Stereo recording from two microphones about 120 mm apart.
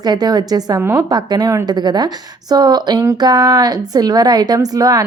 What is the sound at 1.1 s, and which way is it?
A woman's voice, 35° right (ahead or behind).